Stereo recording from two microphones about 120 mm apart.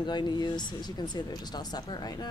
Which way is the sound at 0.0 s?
40° left (ahead or behind).